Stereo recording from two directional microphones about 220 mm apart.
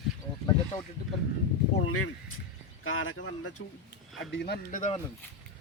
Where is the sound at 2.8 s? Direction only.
65° left (ahead or behind).